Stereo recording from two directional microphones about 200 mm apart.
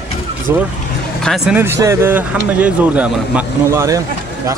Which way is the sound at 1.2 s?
Centre (ahead or behind).